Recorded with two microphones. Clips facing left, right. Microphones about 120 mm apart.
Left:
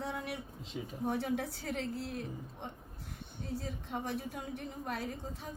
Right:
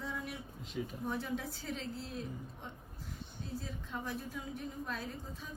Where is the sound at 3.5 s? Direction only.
65° left (ahead or behind).